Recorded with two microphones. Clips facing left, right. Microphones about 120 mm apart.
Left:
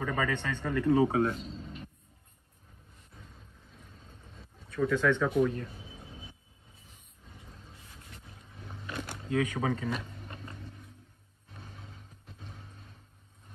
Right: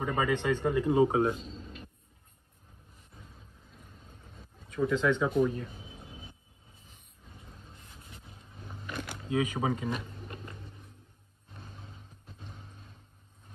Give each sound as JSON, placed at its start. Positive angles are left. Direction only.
{"t": 0.0, "sound": "a man's voice", "side_deg": -20}
{"t": 3.2, "sound": "a sound", "side_deg": -5}
{"t": 4.1, "sound": "vehicle", "side_deg": -10}
{"t": 4.7, "sound": "speech", "side_deg": -15}
{"t": 5.4, "sound": "speech", "side_deg": -5}
{"t": 7.4, "sound": "vehicle", "side_deg": 5}
{"t": 9.3, "sound": "a man's voice", "side_deg": -25}
{"t": 11.5, "sound": "music", "side_deg": 0}
{"t": 12.5, "sound": "vehicle", "side_deg": 0}